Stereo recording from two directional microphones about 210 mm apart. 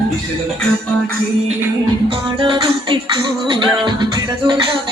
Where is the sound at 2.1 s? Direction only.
25° right (ahead or behind).